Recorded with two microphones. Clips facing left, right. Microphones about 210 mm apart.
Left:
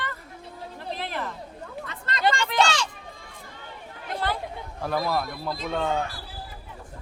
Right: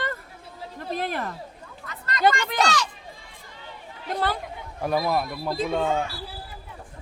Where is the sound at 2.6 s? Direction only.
30° left (ahead or behind).